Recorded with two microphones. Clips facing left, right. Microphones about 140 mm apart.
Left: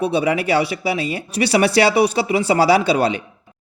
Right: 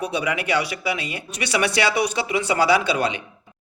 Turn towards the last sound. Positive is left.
turn(degrees=35)  # may be behind; listen again after turning